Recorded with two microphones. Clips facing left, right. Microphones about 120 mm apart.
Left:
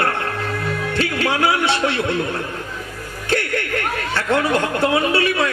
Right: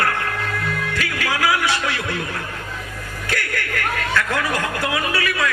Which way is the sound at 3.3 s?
25° left (ahead or behind).